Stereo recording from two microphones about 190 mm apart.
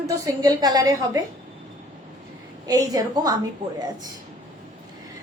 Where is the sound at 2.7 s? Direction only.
20° right (ahead or behind).